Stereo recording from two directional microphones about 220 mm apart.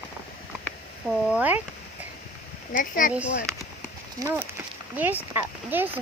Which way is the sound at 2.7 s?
35° left (ahead or behind).